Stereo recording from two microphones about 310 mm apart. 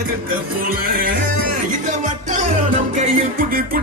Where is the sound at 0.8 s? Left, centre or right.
Right.